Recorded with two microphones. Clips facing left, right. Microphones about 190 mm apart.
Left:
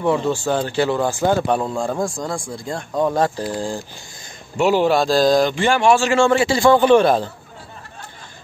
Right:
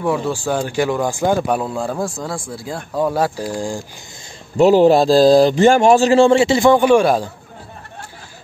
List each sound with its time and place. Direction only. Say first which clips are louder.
0.0 s speech: left 1 dB; 10° right (ahead or behind)
4.6 s a man's voice: right 6 dB; 40° right (ahead or behind); by 7.2 s 10° right (ahead or behind)